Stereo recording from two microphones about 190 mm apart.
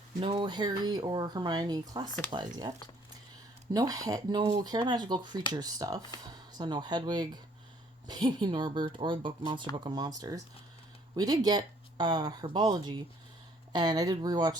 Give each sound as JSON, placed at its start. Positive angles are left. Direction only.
{"t": 0.2, "sound": "speech", "side_deg": -25}